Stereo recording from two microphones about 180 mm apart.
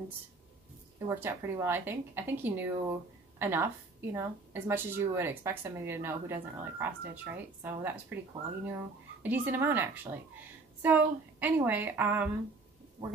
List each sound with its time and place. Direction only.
1.0 s a woman's voice: 15° right (ahead or behind)